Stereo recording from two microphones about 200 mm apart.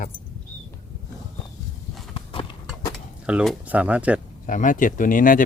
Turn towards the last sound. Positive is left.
turn(degrees=45)  # may be behind; listen again after turning